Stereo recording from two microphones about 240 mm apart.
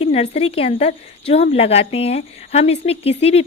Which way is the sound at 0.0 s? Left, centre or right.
Left.